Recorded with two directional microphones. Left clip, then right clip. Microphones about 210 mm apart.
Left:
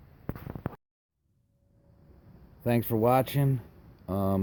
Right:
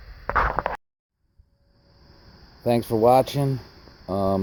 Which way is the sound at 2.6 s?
20° left (ahead or behind).